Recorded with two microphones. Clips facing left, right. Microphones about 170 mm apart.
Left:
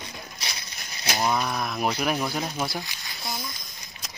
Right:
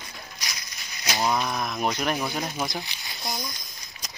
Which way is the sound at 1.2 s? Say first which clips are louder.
Even; centre (ahead or behind).